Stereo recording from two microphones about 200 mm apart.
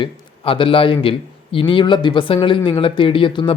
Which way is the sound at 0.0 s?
25° left (ahead or behind).